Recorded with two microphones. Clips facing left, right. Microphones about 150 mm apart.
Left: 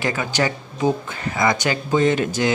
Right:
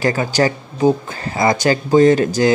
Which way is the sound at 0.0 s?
40° right (ahead or behind).